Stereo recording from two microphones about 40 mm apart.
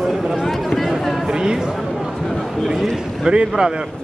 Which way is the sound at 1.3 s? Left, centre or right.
Centre.